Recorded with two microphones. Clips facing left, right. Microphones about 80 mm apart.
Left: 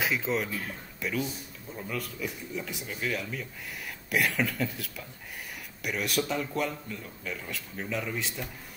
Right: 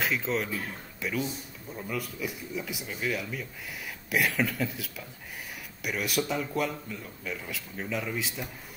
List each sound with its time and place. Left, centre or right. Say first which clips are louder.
0.0 s speech: even; centre